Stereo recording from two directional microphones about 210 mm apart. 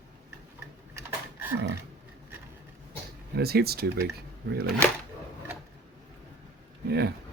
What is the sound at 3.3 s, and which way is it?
Speech, 50° right (ahead or behind).